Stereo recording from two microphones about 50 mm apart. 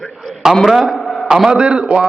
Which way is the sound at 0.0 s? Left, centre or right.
Centre.